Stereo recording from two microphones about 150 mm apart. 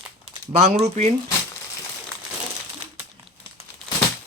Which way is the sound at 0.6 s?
45° right (ahead or behind).